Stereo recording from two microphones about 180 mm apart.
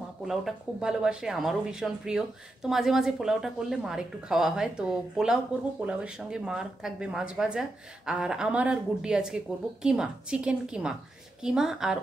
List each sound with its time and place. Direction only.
0.3 s speech: 5° right (ahead or behind)